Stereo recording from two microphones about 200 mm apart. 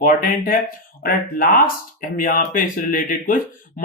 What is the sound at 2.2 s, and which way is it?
Speech, 45° left (ahead or behind).